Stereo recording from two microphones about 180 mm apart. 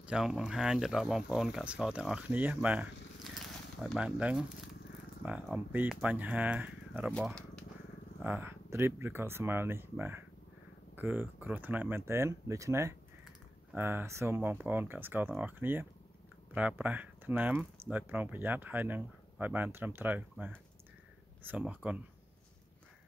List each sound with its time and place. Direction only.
0.0 s speech: 5° right (ahead or behind)
7.1 s speech: 5° left (ahead or behind)
8.2 s speech: 10° right (ahead or behind)